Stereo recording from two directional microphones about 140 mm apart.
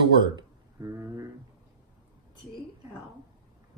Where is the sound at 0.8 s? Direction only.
20° right (ahead or behind).